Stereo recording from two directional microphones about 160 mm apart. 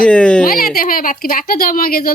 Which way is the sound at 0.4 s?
65° left (ahead or behind).